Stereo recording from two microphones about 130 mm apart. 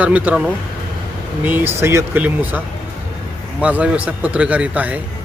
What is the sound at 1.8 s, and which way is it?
Speech, 20° right (ahead or behind).